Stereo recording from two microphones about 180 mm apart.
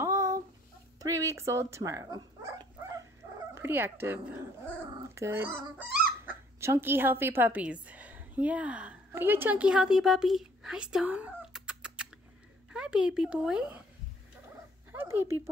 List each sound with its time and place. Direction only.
0.0 s child singing: 15° right (ahead or behind)
0.9 s a woman's voice: 20° right (ahead or behind)
14.9 s a sound: 10° right (ahead or behind)